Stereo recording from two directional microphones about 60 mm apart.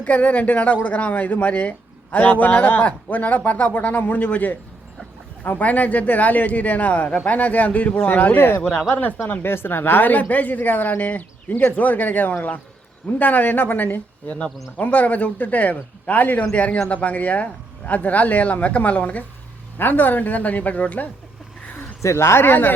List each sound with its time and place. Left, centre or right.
0.0 s speech: left
22.0 s speech: left